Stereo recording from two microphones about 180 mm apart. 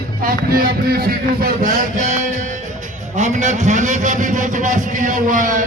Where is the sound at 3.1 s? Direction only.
40° right (ahead or behind).